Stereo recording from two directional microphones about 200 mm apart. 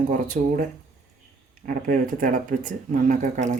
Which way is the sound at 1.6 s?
45° right (ahead or behind).